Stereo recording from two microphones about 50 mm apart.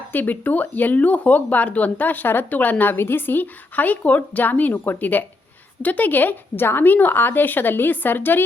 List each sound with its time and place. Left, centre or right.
0.1 s speech: left